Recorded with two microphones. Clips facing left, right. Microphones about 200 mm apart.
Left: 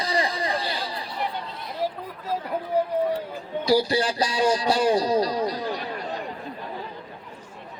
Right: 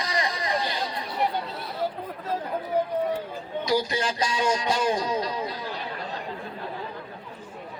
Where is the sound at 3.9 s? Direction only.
35° left (ahead or behind).